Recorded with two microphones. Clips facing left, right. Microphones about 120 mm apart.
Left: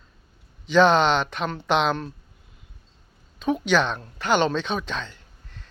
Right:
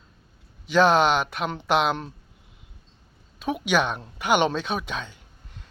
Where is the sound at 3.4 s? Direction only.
10° right (ahead or behind).